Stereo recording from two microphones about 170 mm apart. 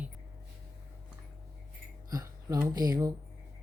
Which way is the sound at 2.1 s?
20° right (ahead or behind).